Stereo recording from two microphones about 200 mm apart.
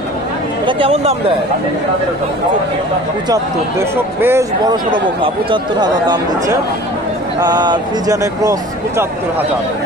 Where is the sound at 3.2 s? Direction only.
15° right (ahead or behind).